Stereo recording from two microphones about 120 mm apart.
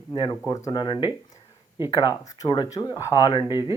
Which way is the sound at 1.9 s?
30° left (ahead or behind).